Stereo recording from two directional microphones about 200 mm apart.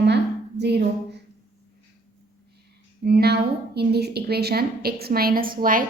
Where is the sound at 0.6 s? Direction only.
55° right (ahead or behind).